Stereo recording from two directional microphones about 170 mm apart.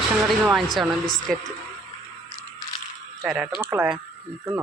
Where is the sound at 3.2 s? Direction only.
5° right (ahead or behind).